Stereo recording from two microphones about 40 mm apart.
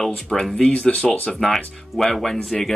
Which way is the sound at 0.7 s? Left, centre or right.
Left.